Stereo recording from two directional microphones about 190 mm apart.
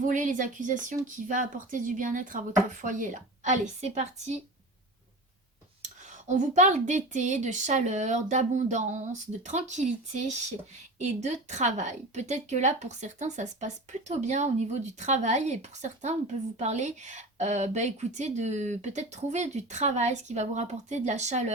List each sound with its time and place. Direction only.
0.0 s speech: 40° right (ahead or behind)
5.8 s speech: 40° right (ahead or behind)